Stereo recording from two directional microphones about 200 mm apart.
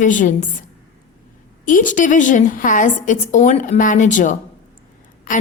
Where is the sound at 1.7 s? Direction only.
40° left (ahead or behind).